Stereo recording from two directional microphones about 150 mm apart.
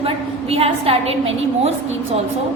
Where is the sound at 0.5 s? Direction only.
40° right (ahead or behind).